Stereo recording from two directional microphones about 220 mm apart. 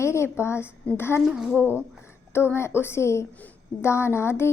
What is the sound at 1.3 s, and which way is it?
Speech, 5° right (ahead or behind).